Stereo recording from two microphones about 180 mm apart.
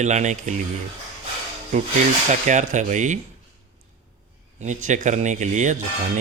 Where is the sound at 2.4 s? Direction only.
40° right (ahead or behind).